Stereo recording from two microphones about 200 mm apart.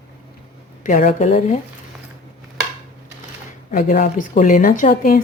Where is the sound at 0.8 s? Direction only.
40° left (ahead or behind).